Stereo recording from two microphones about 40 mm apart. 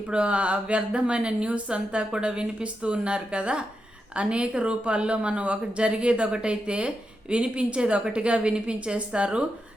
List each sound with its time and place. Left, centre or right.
0.1 s speech: right